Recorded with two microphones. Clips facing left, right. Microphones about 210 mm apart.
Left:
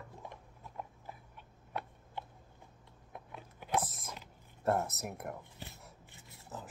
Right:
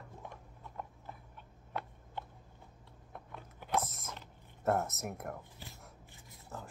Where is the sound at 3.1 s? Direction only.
10° left (ahead or behind).